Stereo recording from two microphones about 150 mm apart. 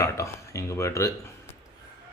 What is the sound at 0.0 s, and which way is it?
Speech, 20° left (ahead or behind).